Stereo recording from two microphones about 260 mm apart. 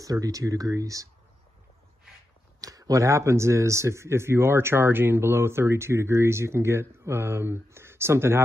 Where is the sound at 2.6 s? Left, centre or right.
Centre.